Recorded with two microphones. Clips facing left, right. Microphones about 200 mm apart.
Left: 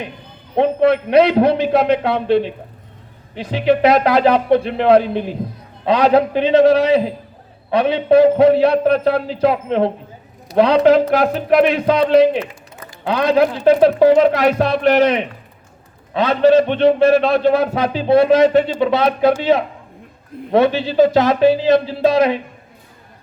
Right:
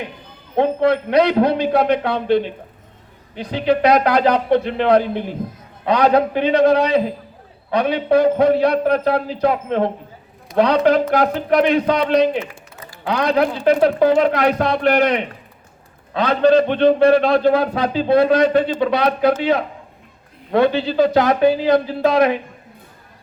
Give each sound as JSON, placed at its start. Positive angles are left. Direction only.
{"t": 0.5, "sound": "a man's voice", "side_deg": 20}
{"t": 7.7, "sound": "a man's voice", "side_deg": 25}
{"t": 11.2, "sound": "a man's voice", "side_deg": 25}